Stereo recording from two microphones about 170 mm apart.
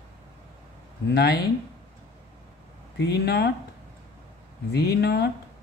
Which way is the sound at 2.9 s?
80° left.